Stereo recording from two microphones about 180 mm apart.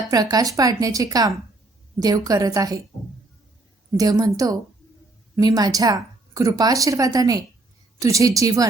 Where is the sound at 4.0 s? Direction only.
20° right (ahead or behind).